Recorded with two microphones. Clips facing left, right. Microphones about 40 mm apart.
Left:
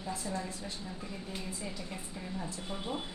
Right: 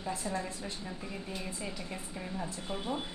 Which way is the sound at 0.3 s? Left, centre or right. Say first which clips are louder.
Right 2 dB; centre.